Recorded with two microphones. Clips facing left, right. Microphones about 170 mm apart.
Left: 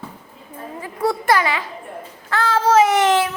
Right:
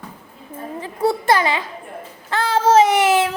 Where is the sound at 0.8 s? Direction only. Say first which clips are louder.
Right 2 dB; 25° right (ahead or behind).